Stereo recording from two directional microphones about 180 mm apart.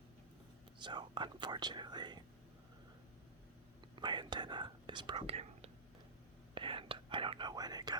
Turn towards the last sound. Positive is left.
turn(degrees=-20)  # may be behind; listen again after turning